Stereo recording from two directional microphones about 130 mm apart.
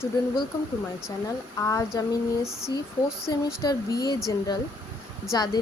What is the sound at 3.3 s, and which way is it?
Speech, 30° left (ahead or behind).